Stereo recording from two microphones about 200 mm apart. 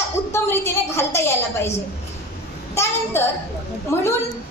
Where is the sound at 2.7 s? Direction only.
10° left (ahead or behind).